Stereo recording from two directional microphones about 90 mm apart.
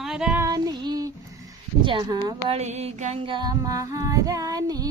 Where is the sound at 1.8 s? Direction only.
65° right (ahead or behind).